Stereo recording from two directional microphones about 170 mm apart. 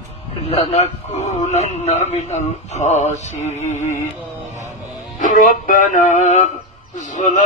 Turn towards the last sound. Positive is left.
turn(degrees=50)  # may be behind; listen again after turning